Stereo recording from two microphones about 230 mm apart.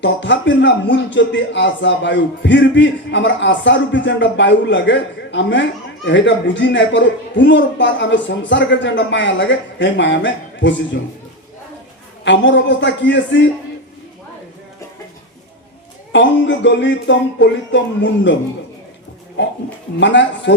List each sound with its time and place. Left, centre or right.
0.0 s speech: left
12.2 s speech: left
16.1 s speech: left
20.0 s speech: left